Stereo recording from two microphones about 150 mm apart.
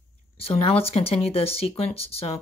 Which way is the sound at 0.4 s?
40° left (ahead or behind).